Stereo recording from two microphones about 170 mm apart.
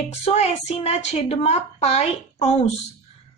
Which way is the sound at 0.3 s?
35° left (ahead or behind).